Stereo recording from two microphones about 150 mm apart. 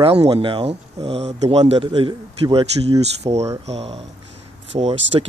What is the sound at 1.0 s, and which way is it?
Speech, 45° right (ahead or behind).